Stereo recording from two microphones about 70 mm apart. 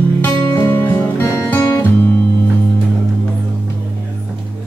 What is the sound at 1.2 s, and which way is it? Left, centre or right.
Music, left.